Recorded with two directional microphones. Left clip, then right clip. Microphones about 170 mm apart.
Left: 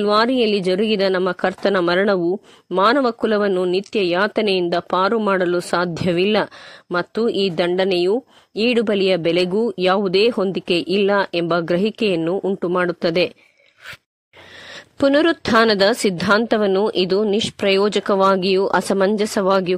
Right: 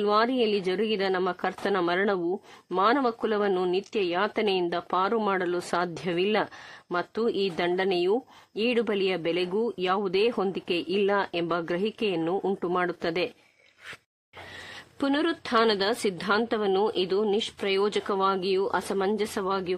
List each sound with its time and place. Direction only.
0.0 s speech: 35° left (ahead or behind)
14.7 s speech: 35° left (ahead or behind)